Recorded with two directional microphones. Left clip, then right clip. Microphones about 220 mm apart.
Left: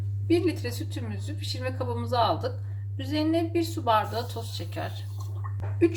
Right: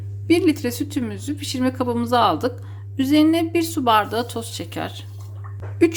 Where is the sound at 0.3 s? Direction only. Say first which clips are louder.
Right 8 dB; 50° right (ahead or behind).